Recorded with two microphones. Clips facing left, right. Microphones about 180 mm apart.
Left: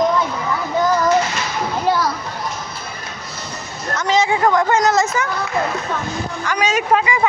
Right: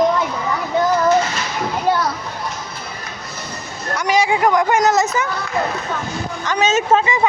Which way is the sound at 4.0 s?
15° right (ahead or behind).